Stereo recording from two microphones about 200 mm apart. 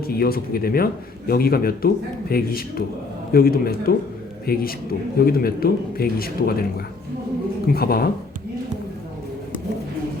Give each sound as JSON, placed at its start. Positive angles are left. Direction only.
{"t": 0.1, "sound": "speech", "side_deg": 50}